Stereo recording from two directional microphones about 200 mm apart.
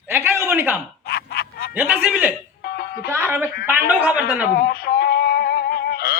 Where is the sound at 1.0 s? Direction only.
50° left (ahead or behind).